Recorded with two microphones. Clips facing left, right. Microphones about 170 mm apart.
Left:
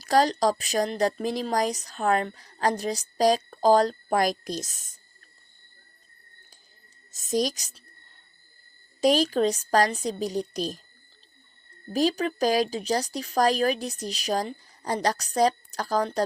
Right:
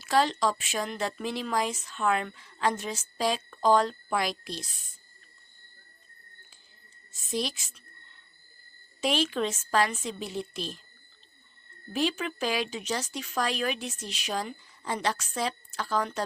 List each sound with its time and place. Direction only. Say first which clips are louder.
0.0 s speech: left 4 dB; 40° left (ahead or behind)
7.1 s speech: left 6 dB; 40° left (ahead or behind)
9.0 s speech: left 6 dB; 40° left (ahead or behind)
11.9 s speech: left 5 dB; 40° left (ahead or behind)